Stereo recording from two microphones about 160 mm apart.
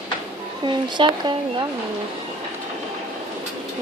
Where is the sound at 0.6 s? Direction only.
30° right (ahead or behind).